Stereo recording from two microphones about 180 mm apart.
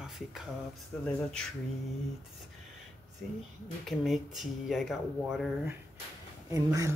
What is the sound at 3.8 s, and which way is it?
Speech, centre (ahead or behind).